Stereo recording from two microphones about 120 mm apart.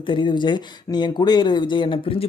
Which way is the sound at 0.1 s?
40° left (ahead or behind).